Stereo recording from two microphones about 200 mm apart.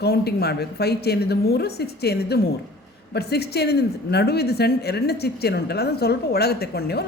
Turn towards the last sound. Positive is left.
turn(degrees=50)  # may be behind; listen again after turning